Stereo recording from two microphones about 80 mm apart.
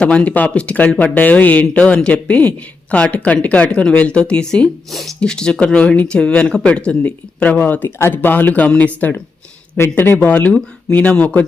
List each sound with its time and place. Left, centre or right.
0.0 s speech: centre